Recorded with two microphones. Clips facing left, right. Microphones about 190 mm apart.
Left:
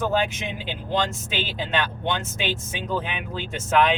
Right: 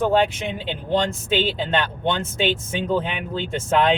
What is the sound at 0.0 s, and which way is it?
Speech, 30° right (ahead or behind).